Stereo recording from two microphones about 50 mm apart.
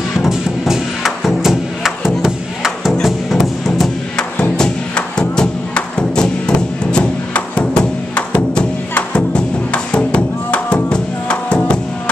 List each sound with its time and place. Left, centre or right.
0.2 s music: centre
3.3 s music: centre
4.4 s music: centre